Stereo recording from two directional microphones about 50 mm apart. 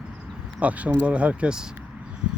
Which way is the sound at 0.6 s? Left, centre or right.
Right.